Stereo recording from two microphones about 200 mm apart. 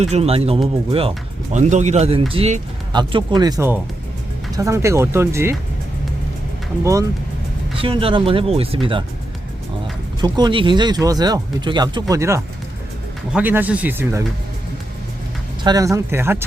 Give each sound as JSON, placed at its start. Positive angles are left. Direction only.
{"t": 0.0, "sound": "a man's voice", "side_deg": -30}
{"t": 7.8, "sound": "speech", "side_deg": -25}
{"t": 10.2, "sound": "speech", "side_deg": -20}
{"t": 15.6, "sound": "speech", "side_deg": -15}